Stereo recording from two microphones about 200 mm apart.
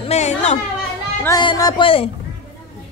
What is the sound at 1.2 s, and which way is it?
Speech, 20° left (ahead or behind).